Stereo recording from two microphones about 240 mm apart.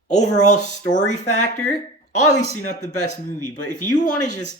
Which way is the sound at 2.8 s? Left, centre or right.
Left.